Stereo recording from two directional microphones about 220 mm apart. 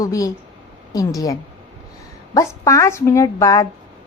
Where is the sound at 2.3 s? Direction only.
15° left (ahead or behind).